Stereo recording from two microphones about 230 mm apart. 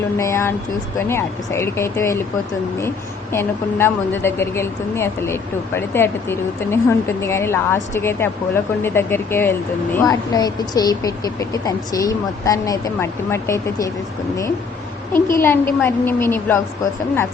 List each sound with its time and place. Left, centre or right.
0.2 s a woman's voice: centre
3.3 s a woman's voice: centre
15.1 s a woman's voice: centre